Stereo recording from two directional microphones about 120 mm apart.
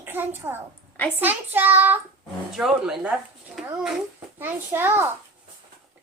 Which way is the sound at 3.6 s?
Centre (ahead or behind).